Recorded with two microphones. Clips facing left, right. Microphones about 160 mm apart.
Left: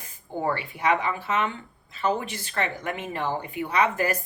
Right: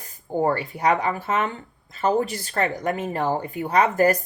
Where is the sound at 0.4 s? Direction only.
40° right (ahead or behind).